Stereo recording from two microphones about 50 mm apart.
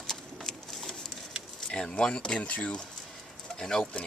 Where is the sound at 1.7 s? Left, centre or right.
Centre.